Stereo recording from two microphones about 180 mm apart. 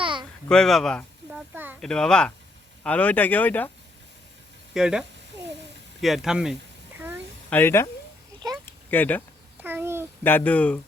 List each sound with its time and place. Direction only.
0.0 s a sound: 25° right (ahead or behind)
0.4 s speech: 5° left (ahead or behind)
1.5 s speech: 10° right (ahead or behind)
1.8 s speech: 5° left (ahead or behind)
4.7 s speech: 5° right (ahead or behind)
7.5 s speech: 15° left (ahead or behind)
8.9 s speech: 10° left (ahead or behind)
9.6 s babbling: 10° right (ahead or behind)
10.2 s speech: 10° left (ahead or behind)